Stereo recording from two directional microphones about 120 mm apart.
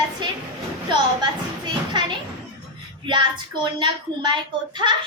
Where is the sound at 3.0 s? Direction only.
40° right (ahead or behind).